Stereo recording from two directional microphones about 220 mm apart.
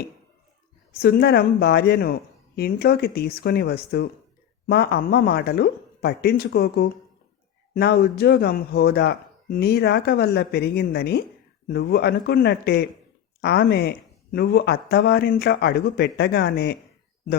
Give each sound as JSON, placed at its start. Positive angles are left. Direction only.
{"t": 0.9, "sound": "speech", "side_deg": 45}